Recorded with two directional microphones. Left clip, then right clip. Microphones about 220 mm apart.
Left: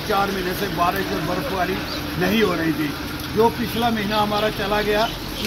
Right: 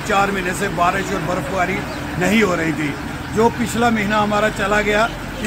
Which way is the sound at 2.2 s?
20° right (ahead or behind).